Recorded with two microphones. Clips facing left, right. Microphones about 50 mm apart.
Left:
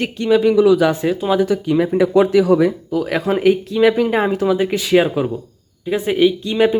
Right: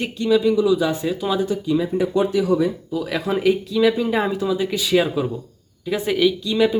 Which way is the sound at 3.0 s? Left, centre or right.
Left.